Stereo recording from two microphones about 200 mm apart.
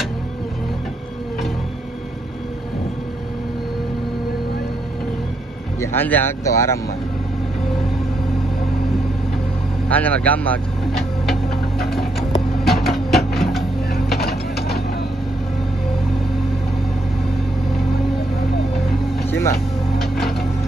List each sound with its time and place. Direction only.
5.8 s speech: 10° left (ahead or behind)
9.8 s speech: 10° left (ahead or behind)
12.6 s printer: centre (ahead or behind)
13.9 s a sound: 50° left (ahead or behind)